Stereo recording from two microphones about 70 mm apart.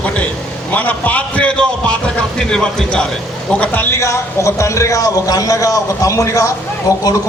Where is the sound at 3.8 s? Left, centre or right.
Left.